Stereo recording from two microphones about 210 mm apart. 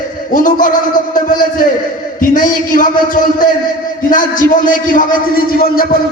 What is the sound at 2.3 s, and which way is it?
A man's voice, 40° left (ahead or behind).